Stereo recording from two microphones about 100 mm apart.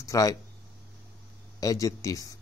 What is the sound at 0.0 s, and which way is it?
Speech, 35° left (ahead or behind).